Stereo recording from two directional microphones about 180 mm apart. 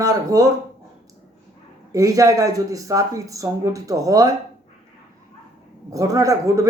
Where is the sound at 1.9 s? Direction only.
20° right (ahead or behind).